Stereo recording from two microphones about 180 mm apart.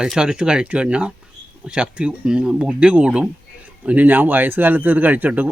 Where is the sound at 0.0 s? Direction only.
5° right (ahead or behind).